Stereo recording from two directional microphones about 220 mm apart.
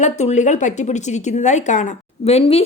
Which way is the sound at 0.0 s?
30° left (ahead or behind).